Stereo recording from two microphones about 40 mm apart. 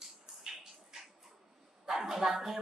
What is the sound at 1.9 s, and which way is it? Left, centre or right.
Speech, centre.